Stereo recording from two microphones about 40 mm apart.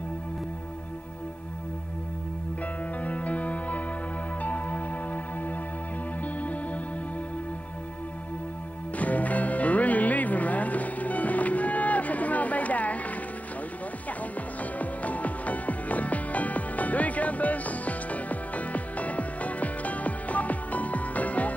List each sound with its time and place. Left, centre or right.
3.0 s music: left
8.9 s music: left
14.6 s music: left